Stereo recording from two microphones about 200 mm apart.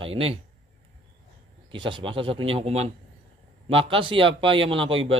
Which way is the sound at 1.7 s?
25° right (ahead or behind).